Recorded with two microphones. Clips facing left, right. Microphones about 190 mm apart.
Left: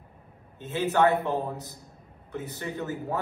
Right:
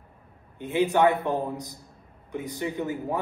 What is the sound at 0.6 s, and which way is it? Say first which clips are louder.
A man's voice: right 2 dB; 15° right (ahead or behind).